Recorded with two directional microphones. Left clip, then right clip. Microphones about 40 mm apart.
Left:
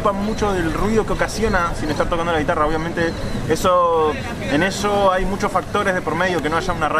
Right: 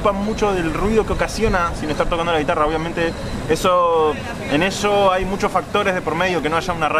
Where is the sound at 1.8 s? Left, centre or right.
Right.